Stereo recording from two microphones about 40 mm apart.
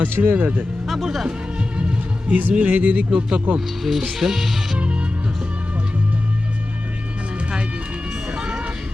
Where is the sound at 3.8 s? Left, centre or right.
Centre.